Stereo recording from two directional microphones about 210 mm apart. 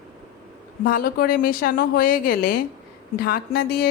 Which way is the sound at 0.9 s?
45° left (ahead or behind).